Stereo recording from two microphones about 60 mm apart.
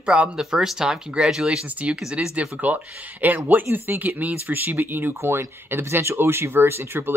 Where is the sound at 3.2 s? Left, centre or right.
Right.